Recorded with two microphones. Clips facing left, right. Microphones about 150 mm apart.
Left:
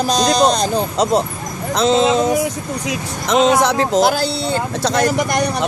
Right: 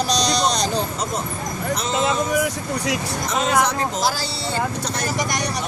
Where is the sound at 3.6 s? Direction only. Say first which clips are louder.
Left 8 dB; 90° left.